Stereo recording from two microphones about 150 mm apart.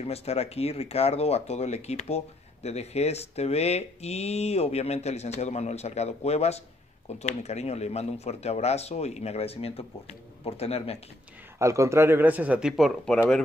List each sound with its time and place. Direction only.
0.0 s speech: 45° left (ahead or behind)
11.5 s speech: 20° right (ahead or behind); by 13.4 s 5° left (ahead or behind)